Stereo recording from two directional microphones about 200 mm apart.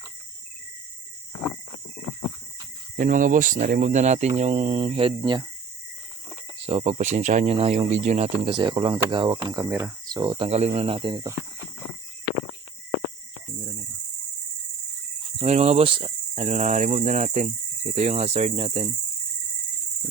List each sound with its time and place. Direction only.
2.9 s cricket: 40° right (ahead or behind); by 5.5 s 25° right (ahead or behind)
6.7 s cricket: 30° right (ahead or behind)
8.4 s speech: 25° right (ahead or behind)
15.4 s cricket: 30° right (ahead or behind)